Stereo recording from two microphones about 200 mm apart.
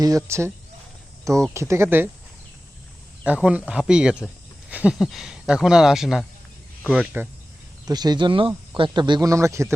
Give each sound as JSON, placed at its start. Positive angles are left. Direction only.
{"t": 0.0, "sound": "speech", "side_deg": -15}
{"t": 1.5, "sound": "speech", "side_deg": -15}
{"t": 3.2, "sound": "speech", "side_deg": -5}
{"t": 7.9, "sound": "speech", "side_deg": -20}